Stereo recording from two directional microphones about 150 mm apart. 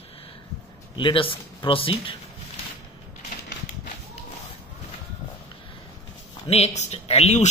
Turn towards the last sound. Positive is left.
turn(degrees=45)  # may be behind; listen again after turning